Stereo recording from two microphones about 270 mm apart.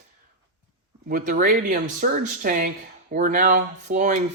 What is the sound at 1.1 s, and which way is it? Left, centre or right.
Speech, right.